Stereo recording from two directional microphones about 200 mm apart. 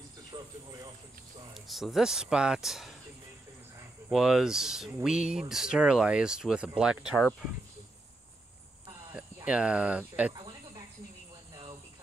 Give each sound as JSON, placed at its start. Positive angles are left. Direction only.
{"t": 0.3, "sound": "a sound", "side_deg": -20}
{"t": 1.5, "sound": "speech", "side_deg": 0}
{"t": 4.1, "sound": "speech", "side_deg": 0}
{"t": 9.1, "sound": "speech", "side_deg": -5}
{"t": 10.3, "sound": "cricket", "side_deg": -20}